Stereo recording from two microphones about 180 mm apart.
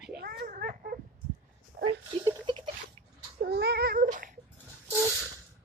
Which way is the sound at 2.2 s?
25° right (ahead or behind).